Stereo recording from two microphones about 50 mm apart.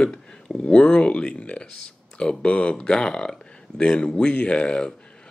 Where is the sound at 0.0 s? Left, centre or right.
Centre.